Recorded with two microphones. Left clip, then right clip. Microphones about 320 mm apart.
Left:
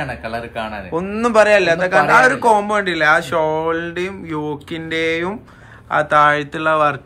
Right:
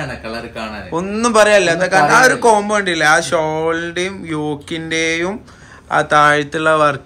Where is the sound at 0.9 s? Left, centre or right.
Centre.